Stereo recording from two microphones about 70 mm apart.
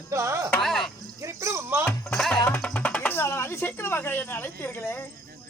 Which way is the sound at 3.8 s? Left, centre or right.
Left.